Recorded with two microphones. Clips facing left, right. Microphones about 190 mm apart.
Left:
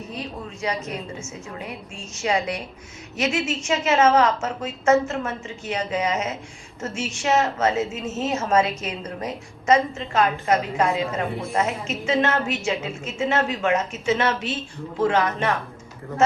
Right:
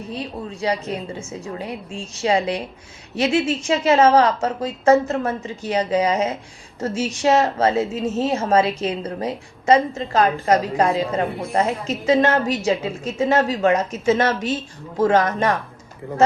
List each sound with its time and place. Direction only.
0.6 s a woman's voice: 35° right (ahead or behind)